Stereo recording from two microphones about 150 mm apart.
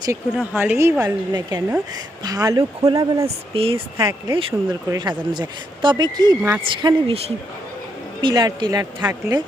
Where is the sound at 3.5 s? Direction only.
40° right (ahead or behind).